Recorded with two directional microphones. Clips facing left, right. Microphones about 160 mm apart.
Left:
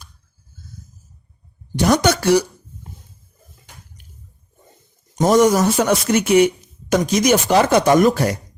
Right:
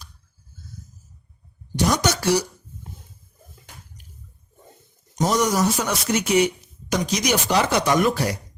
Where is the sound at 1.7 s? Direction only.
55° left (ahead or behind).